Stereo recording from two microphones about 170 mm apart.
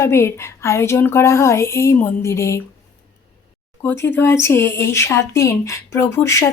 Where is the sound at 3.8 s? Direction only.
10° left (ahead or behind).